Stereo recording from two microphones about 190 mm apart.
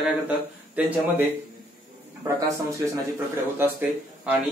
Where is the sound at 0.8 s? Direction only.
10° right (ahead or behind).